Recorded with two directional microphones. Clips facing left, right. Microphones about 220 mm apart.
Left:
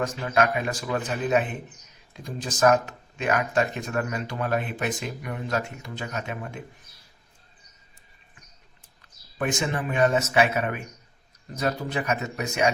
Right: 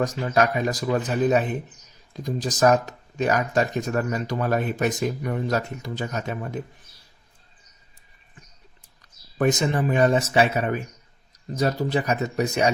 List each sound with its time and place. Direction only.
0.0 s speech: 40° right (ahead or behind)
9.4 s speech: 40° right (ahead or behind)